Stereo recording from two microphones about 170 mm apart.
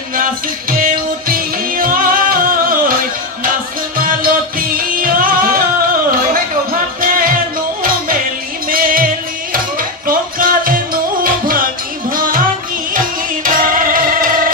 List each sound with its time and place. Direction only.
0.1 s music: 55° right (ahead or behind)
7.0 s music: 55° right (ahead or behind)
8.6 s music: 55° right (ahead or behind)